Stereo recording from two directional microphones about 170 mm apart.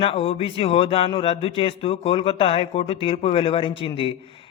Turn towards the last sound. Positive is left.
turn(degrees=30)  # may be behind; listen again after turning